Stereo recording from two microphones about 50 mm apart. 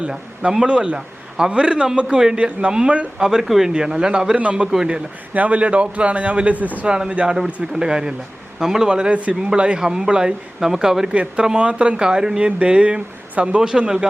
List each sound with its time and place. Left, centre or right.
0.7 s a man's voice: right
3.2 s a man's voice: centre
3.7 s a man's voice: centre; by 6.7 s right
6.8 s a man's voice: centre
9.0 s speech: right
9.8 s a man's voice: centre
11.1 s a man's voice: right
12.4 s a man's voice: right